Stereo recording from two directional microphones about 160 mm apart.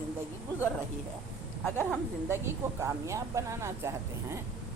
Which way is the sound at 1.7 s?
5° left (ahead or behind).